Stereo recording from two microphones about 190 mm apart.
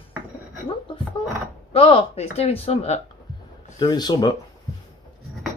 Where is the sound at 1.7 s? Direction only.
30° left (ahead or behind).